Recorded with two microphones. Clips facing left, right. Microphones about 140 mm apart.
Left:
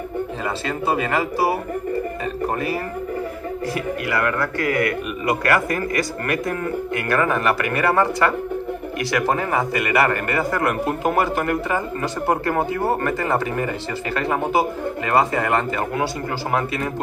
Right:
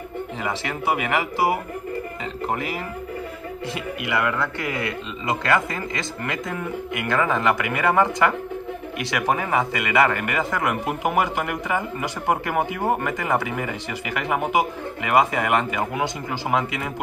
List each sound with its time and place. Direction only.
0.7 s a man's voice: 15° right (ahead or behind)
3.7 s a man's voice: 20° right (ahead or behind)